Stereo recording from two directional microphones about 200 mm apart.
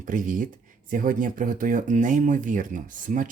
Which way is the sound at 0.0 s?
40° right (ahead or behind).